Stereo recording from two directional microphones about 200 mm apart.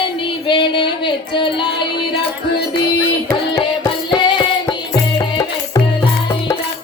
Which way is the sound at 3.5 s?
15° left (ahead or behind).